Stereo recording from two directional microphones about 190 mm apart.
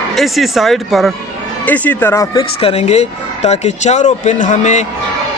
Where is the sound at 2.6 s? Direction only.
35° left (ahead or behind).